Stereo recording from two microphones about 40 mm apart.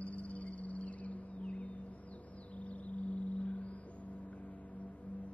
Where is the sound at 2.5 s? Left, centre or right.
Left.